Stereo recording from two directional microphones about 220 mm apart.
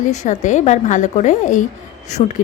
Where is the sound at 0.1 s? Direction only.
35° left (ahead or behind).